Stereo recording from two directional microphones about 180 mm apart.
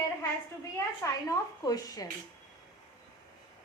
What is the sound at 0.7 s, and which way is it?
A woman's voice, 15° left (ahead or behind).